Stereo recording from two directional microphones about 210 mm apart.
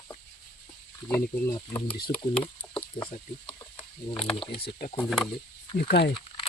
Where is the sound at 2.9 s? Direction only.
20° left (ahead or behind).